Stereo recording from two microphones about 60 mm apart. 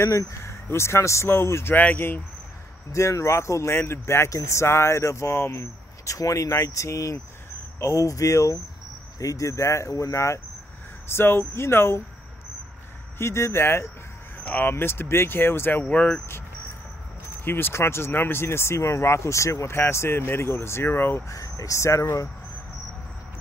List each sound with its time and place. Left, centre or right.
0.0 s speech: left
1.8 s speech: left
2.9 s speech: left
4.3 s speech: left
11.1 s speech: left
13.2 s speech: left
14.4 s speech: left
15.8 s speech: left
17.5 s speech: left
19.8 s speech: left
21.3 s speech: left